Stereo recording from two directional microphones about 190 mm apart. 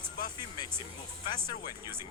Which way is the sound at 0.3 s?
20° left (ahead or behind).